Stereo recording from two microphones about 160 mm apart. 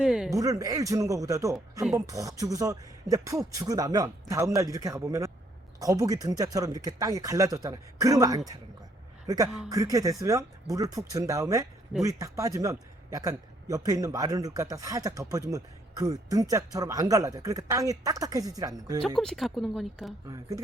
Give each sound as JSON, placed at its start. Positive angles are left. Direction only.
{"t": 0.0, "sound": "a sound", "side_deg": -5}
{"t": 0.3, "sound": "a man's voice", "side_deg": -20}
{"t": 19.0, "sound": "speech", "side_deg": 0}